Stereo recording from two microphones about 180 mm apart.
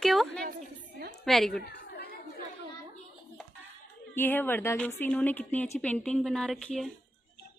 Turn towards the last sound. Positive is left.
turn(degrees=0)  # may be behind; listen again after turning